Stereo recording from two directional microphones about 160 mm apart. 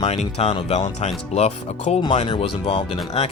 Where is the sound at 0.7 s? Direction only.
45° left (ahead or behind).